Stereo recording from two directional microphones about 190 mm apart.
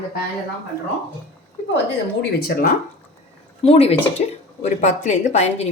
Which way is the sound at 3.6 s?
30° left (ahead or behind).